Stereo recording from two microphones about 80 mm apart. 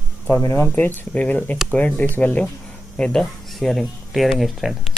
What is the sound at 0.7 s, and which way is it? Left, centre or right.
Speech, centre.